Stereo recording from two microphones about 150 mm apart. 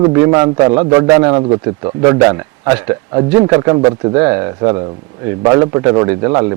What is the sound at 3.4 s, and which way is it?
Speech, 25° right (ahead or behind).